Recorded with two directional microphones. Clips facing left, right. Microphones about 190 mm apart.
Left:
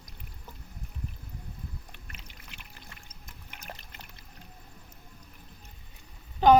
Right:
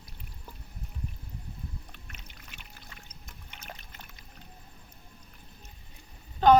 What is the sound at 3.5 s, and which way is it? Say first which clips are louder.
Trickle: left 2 dB; 5° left (ahead or behind).